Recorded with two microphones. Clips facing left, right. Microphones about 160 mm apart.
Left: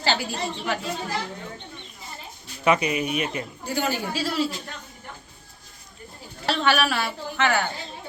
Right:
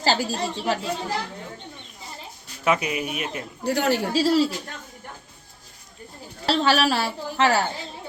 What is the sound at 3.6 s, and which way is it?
Speech, 70° right (ahead or behind).